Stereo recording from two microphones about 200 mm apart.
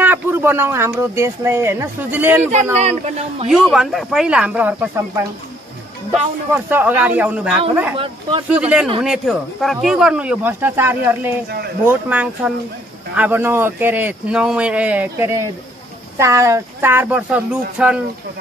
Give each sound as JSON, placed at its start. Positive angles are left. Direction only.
{"t": 0.0, "sound": "speech", "side_deg": -10}
{"t": 2.5, "sound": "speech", "side_deg": -35}
{"t": 3.4, "sound": "speech", "side_deg": 0}
{"t": 7.9, "sound": "speech", "side_deg": -25}
{"t": 8.5, "sound": "speech", "side_deg": -5}